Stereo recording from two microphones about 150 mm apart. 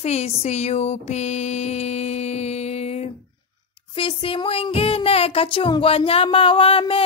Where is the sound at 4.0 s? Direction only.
35° left (ahead or behind).